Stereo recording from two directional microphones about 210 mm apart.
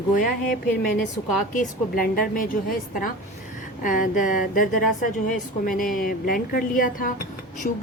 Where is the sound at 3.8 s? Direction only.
40° left (ahead or behind).